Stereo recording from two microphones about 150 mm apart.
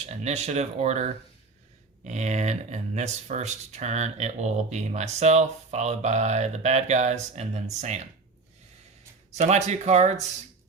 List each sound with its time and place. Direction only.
0.0 s speech: 45° right (ahead or behind)
9.4 s speech: 50° right (ahead or behind)